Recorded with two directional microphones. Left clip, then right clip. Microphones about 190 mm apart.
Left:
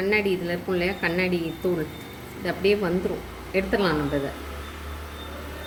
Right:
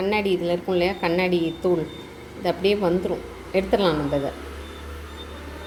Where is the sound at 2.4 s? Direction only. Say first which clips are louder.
Right 2 dB; 20° right (ahead or behind).